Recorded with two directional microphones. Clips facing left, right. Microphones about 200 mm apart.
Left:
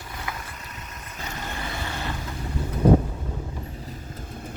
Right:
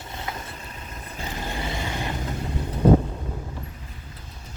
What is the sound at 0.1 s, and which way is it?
Vehicle, 25° right (ahead or behind).